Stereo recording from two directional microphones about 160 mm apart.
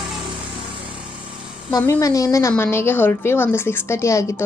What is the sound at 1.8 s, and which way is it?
A woman's voice, 20° left (ahead or behind).